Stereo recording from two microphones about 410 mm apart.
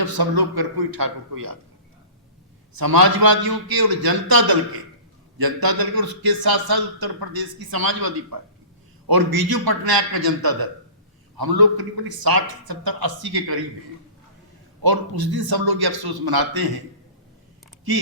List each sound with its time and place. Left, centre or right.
0.0 s a man's voice: right
2.7 s a man's voice: right
14.8 s a man's voice: right